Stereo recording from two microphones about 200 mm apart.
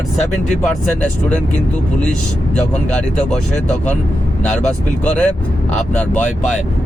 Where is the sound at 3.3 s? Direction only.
35° left (ahead or behind).